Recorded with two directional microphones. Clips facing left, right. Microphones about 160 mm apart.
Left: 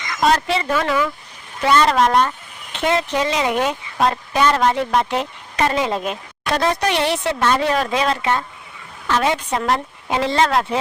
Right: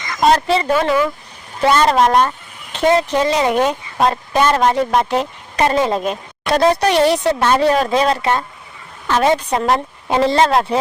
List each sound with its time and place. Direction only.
0.0 s speech: 35° right (ahead or behind)